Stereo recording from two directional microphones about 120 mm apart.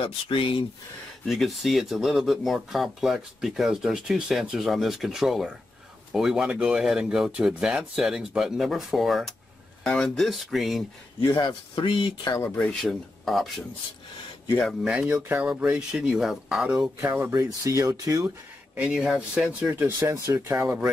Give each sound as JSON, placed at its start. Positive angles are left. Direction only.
{"t": 0.0, "sound": "speech", "side_deg": 50}
{"t": 1.2, "sound": "speech", "side_deg": 0}
{"t": 11.2, "sound": "speech", "side_deg": 40}
{"t": 12.5, "sound": "speech", "side_deg": 5}
{"t": 14.6, "sound": "speech", "side_deg": 0}
{"t": 15.2, "sound": "speech", "side_deg": -15}
{"t": 17.0, "sound": "speech", "side_deg": -20}
{"t": 18.8, "sound": "speech", "side_deg": -5}